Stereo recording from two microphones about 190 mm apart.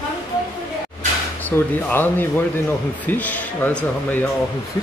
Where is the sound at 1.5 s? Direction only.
10° left (ahead or behind).